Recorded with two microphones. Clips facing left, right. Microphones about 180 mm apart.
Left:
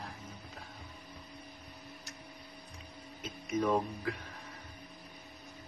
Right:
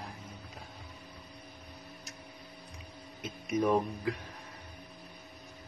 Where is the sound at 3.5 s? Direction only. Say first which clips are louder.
Right 2 dB; 15° right (ahead or behind).